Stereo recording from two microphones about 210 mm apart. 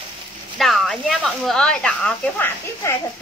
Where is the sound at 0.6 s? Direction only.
Centre (ahead or behind).